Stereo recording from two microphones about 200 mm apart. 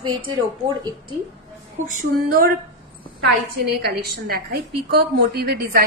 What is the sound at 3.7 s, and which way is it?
A woman's voice, 50° right (ahead or behind).